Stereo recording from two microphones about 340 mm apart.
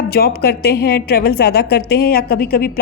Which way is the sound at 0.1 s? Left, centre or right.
Left.